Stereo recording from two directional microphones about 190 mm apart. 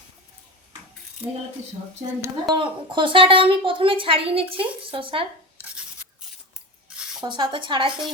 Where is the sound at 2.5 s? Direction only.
25° right (ahead or behind).